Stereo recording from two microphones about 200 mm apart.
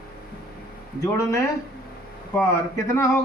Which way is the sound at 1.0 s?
15° left (ahead or behind).